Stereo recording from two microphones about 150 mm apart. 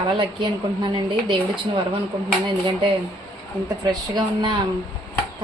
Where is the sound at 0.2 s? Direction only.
30° right (ahead or behind).